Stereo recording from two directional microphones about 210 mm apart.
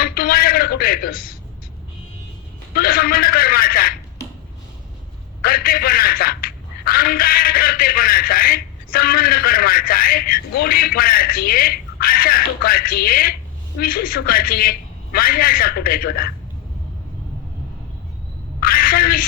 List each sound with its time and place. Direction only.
0.0 s a sound: 45° left (ahead or behind)
2.7 s a man's voice: 45° left (ahead or behind)
5.4 s a man's voice: 45° left (ahead or behind)
18.6 s a man's voice: 45° left (ahead or behind)